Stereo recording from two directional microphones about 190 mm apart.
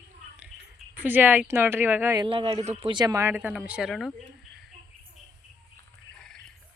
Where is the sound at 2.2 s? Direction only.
30° right (ahead or behind).